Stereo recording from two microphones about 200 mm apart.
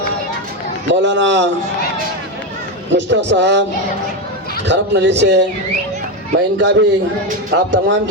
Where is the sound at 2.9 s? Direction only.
60° right (ahead or behind).